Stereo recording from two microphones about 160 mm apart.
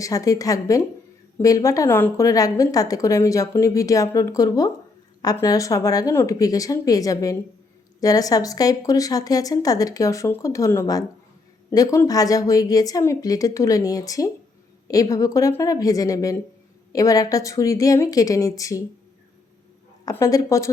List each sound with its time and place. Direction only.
0.0 s a woman's voice: 20° left (ahead or behind)
20.1 s a woman's voice: 20° left (ahead or behind)